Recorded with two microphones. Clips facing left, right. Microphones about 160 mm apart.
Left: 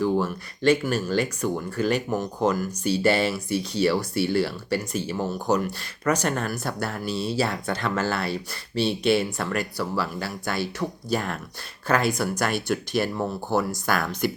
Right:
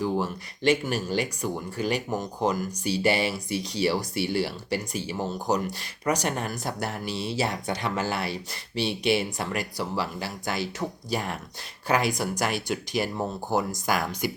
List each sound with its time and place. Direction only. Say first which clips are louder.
0.0 s speech: left 4 dB; 15° right (ahead or behind)